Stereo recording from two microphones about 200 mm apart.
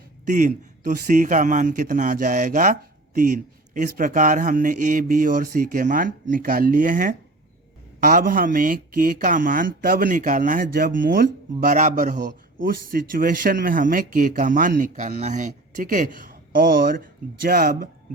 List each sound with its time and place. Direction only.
0.3 s a man's voice: 40° right (ahead or behind)